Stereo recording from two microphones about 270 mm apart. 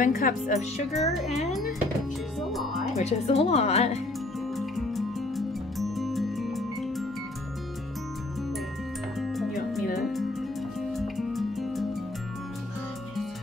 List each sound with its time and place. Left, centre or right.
0.0 s speech: left
0.9 s a child's voice: centre
3.0 s speech: left
4.6 s music: centre
9.2 s music: centre
10.9 s music: centre